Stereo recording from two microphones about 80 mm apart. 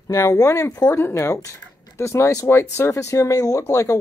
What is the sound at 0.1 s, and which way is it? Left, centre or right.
Speech, left.